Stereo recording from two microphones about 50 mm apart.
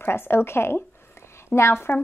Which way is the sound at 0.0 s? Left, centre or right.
Left.